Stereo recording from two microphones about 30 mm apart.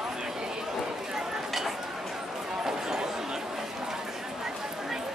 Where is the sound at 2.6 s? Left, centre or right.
Right.